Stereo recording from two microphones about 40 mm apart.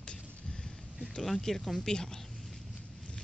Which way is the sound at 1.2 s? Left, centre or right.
Centre.